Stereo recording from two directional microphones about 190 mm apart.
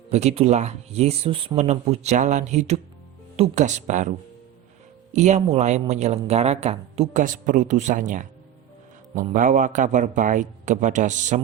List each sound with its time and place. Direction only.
0.1 s speech: 35° right (ahead or behind)
5.1 s speech: 40° right (ahead or behind)
9.3 s speech: 40° right (ahead or behind)